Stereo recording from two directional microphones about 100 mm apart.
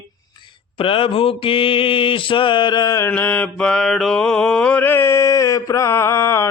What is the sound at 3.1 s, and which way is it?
Mantra, 15° left (ahead or behind).